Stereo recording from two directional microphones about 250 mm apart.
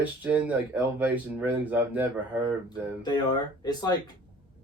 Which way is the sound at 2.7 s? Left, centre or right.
Centre.